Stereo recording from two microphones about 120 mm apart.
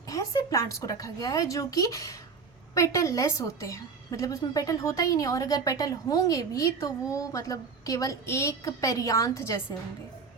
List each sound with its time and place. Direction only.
0.1 s a woman's voice: 30° left (ahead or behind)